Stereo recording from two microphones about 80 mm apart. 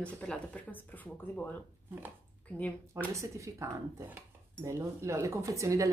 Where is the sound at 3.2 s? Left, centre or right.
Right.